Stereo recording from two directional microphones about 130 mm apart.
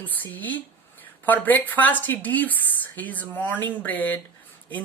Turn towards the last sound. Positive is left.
turn(degrees=10)  # may be behind; listen again after turning